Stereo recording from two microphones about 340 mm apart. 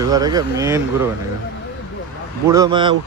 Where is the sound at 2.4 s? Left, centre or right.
Centre.